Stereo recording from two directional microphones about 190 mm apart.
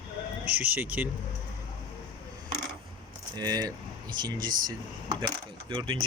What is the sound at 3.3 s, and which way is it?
Speech, 20° right (ahead or behind).